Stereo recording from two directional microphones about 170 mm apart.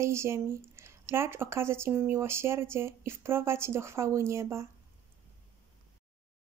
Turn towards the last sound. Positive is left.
turn(degrees=-15)  # may be behind; listen again after turning